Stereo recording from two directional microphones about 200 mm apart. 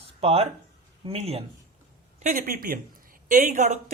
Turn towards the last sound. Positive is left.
turn(degrees=-35)  # may be behind; listen again after turning